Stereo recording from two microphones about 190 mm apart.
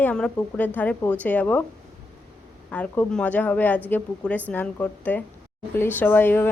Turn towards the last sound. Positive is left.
turn(degrees=10)  # may be behind; listen again after turning